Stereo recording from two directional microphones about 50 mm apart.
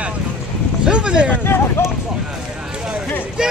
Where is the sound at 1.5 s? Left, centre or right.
Left.